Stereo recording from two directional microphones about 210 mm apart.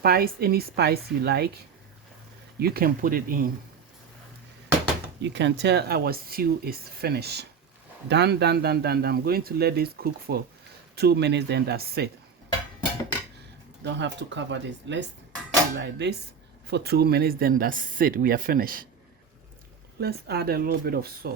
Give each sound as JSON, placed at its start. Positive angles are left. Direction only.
{"t": 0.0, "sound": "speech", "side_deg": -45}
{"t": 5.2, "sound": "speech", "side_deg": -55}
{"t": 13.8, "sound": "speech", "side_deg": -55}
{"t": 20.0, "sound": "speech", "side_deg": -50}